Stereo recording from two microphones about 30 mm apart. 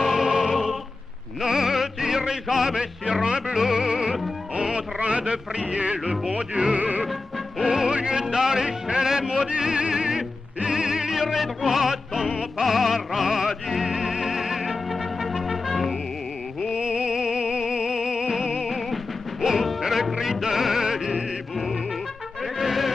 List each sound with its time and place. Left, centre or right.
0.0 s music: centre
3.5 s music: centre
4.6 s a sound: right
6.5 s music: right
7.1 s music: centre
7.6 s music: centre
7.9 s speech: right
9.8 s music: right
16.7 s music: right
22.4 s brass instrument: centre